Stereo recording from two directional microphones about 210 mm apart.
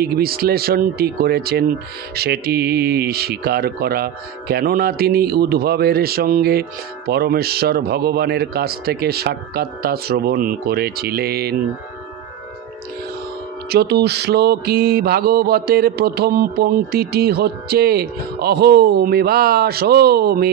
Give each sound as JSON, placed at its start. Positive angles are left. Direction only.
{"t": 0.0, "sound": "mantra", "side_deg": -45}
{"t": 13.7, "sound": "mantra", "side_deg": -50}